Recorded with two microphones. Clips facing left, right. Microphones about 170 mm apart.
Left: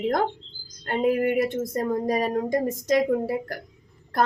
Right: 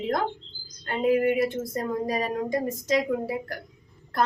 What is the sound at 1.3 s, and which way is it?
A woman's voice, 45° left (ahead or behind).